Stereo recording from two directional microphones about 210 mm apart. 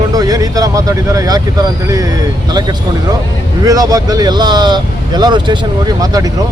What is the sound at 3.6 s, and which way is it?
Speech, 15° right (ahead or behind).